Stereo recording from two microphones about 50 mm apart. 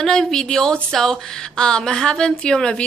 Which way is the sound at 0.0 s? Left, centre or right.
Centre.